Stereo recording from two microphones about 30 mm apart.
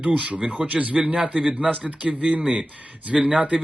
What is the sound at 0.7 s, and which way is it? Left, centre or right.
Speech, centre.